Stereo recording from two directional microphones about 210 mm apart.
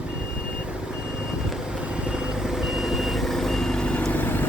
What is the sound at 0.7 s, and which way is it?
Vehicle, 5° right (ahead or behind).